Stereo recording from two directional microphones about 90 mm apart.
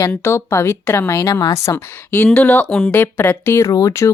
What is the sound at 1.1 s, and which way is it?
Speech, 45° left (ahead or behind).